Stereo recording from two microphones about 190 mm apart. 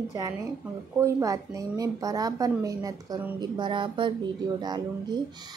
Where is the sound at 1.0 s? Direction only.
15° right (ahead or behind).